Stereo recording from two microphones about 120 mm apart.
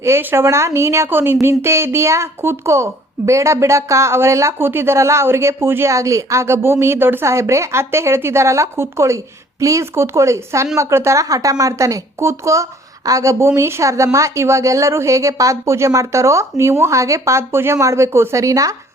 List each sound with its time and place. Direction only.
0.0 s speech: 20° right (ahead or behind)